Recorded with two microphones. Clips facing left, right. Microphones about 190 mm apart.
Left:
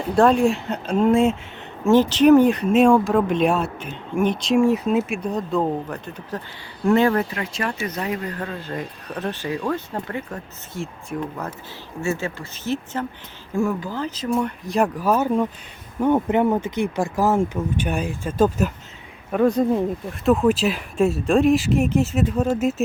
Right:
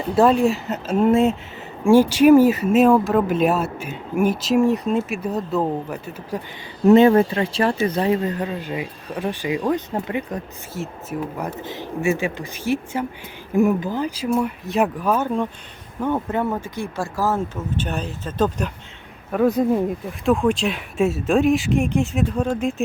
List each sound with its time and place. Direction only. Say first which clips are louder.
0.0 s speech: even; 5° right (ahead or behind)
6.8 s speech: right 6 dB; 20° right (ahead or behind)
10.8 s speech: right 1 dB; 5° right (ahead or behind)
11.4 s speech: right 6 dB; 15° right (ahead or behind); by 18.7 s 10° left (ahead or behind)
19.3 s speech: even; 5° right (ahead or behind)